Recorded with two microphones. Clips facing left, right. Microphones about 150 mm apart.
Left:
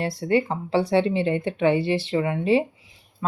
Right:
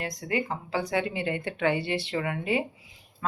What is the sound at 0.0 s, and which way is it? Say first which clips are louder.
Speech: left 8 dB; 30° left (ahead or behind).